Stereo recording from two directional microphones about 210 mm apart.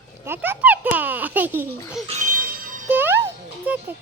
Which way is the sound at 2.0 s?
35° right (ahead or behind).